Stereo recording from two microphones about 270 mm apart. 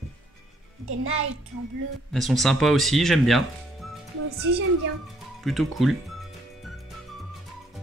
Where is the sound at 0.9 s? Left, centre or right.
Right.